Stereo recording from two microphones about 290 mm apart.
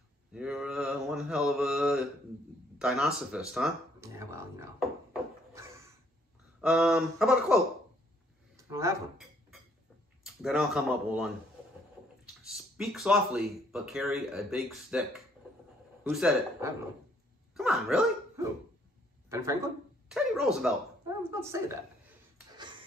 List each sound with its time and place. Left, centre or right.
0.3 s mantra: centre
2.8 s speech: centre
5.5 s a sound: centre
6.6 s speech: centre
8.5 s a sound: centre
10.2 s speech: centre
12.4 s speech: centre
17.6 s dog: centre
19.2 s a sound: centre
20.6 s a woman's voice: centre